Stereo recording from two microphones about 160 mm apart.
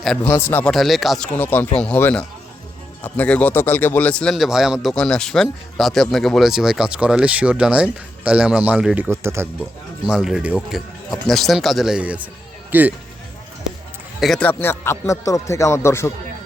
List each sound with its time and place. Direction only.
0.0 s speech: 5° left (ahead or behind)
0.3 s speech: 15° left (ahead or behind)
0.7 s speech: centre (ahead or behind)
1.3 s speech: 10° left (ahead or behind); by 9.0 s 5° right (ahead or behind)
9.0 s speech: 15° right (ahead or behind)
10.0 s speech: 5° right (ahead or behind)
14.2 s speech: 5° left (ahead or behind)